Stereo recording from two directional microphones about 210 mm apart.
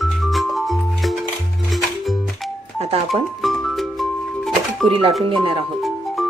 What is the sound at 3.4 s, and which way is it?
Music, centre (ahead or behind).